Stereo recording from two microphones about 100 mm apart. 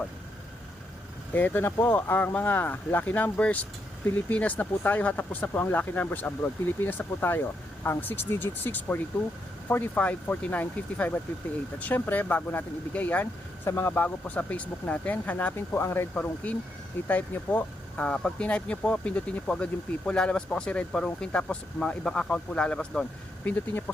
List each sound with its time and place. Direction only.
1.3 s speech: 20° left (ahead or behind)